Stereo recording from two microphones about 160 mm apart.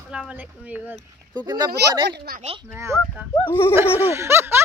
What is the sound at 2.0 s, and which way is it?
Speech, 75° right (ahead or behind).